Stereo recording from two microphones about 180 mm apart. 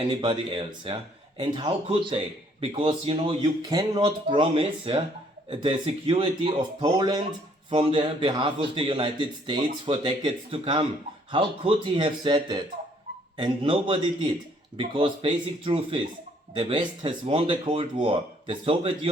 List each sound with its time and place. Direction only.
0.0 s speech: 25° right (ahead or behind)